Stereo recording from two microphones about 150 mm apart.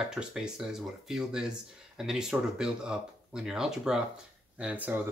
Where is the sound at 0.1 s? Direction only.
5° right (ahead or behind).